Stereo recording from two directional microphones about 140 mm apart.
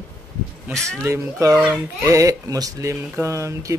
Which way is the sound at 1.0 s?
20° right (ahead or behind).